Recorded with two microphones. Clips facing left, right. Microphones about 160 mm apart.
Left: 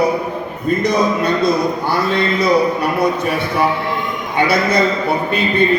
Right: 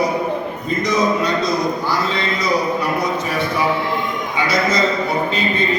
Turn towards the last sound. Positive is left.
turn(degrees=60)  # may be behind; listen again after turning